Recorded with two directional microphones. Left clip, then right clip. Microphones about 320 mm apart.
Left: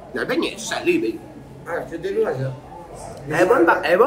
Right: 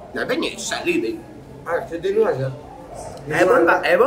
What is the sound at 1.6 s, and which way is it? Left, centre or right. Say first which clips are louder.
Speech: right 4 dB; centre.